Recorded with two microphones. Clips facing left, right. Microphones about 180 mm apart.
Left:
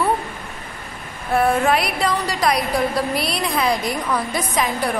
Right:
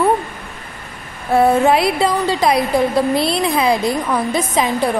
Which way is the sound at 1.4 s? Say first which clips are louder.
Right 5 dB; 25° right (ahead or behind).